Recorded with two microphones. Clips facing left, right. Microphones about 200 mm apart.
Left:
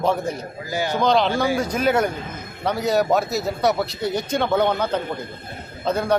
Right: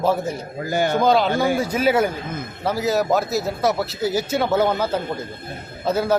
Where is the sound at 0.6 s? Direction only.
55° right (ahead or behind).